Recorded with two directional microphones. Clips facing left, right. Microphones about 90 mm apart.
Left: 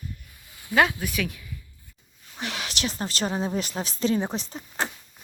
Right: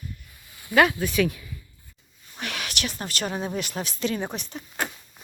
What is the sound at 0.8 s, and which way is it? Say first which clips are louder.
Speech: right 3 dB; 10° left (ahead or behind).